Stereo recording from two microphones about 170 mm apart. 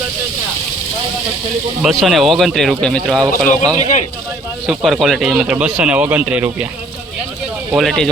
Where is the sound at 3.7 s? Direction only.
40° left (ahead or behind).